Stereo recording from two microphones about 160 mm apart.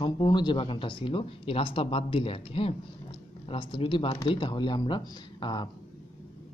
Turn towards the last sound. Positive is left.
turn(degrees=30)  # may be behind; listen again after turning